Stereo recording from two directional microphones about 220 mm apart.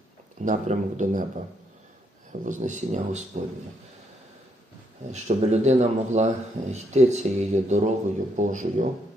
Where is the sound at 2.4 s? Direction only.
35° right (ahead or behind).